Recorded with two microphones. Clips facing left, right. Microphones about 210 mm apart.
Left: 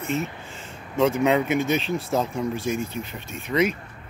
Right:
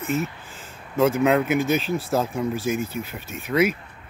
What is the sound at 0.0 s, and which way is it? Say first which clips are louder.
Speech: right 1 dB; centre (ahead or behind).